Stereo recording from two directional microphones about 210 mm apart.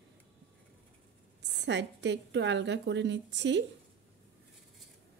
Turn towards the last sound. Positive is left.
turn(degrees=-60)  # may be behind; listen again after turning